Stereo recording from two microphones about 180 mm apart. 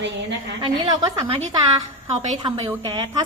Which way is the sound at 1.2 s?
30° right (ahead or behind).